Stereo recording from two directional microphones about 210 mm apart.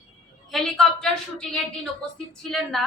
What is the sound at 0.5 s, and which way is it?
A woman's voice, centre (ahead or behind).